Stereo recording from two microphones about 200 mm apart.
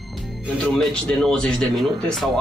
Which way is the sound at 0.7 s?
5° left (ahead or behind).